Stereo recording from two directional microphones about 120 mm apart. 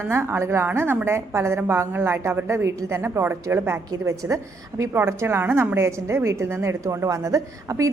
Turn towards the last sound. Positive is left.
turn(degrees=-25)  # may be behind; listen again after turning